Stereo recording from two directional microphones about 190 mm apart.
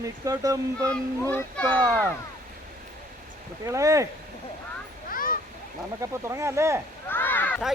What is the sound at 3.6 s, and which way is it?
Speech, 15° right (ahead or behind).